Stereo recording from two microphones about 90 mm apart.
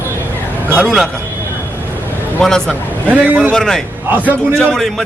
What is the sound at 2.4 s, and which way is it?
Speech, 5° left (ahead or behind).